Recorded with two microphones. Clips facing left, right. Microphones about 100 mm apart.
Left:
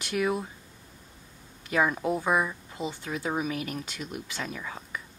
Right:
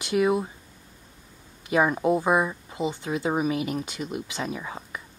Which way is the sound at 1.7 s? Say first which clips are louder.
Right 4 dB; 15° right (ahead or behind).